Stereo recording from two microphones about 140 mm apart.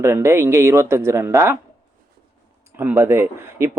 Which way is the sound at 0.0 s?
20° right (ahead or behind).